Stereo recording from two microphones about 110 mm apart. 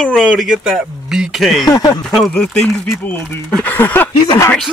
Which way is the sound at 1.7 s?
35° left (ahead or behind).